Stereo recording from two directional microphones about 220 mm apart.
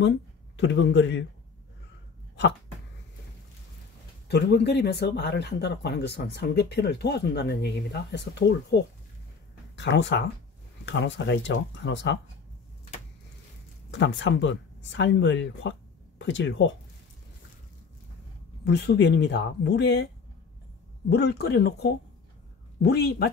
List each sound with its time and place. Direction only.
0.6 s speech: 55° left (ahead or behind)
4.3 s speech: 50° left (ahead or behind)
13.8 s speech: 55° left (ahead or behind)
18.6 s speech: 50° left (ahead or behind)
21.1 s speech: 50° left (ahead or behind)